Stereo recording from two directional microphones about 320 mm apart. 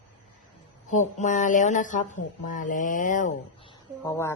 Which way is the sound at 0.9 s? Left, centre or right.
Left.